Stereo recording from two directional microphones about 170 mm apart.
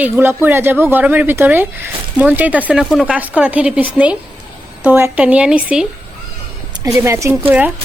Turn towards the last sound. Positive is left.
turn(degrees=-10)  # may be behind; listen again after turning